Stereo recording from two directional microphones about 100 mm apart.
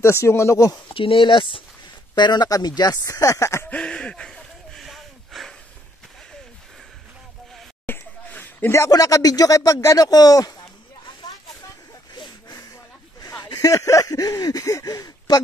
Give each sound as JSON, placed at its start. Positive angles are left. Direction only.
{"t": 0.0, "sound": "speech", "side_deg": 25}
{"t": 0.9, "sound": "speech", "side_deg": 60}
{"t": 3.0, "sound": "speech", "side_deg": 35}
{"t": 3.7, "sound": "a sound", "side_deg": 10}
{"t": 7.8, "sound": "speech", "side_deg": 20}
{"t": 12.1, "sound": "a sound", "side_deg": 45}
{"t": 13.2, "sound": "speech", "side_deg": 40}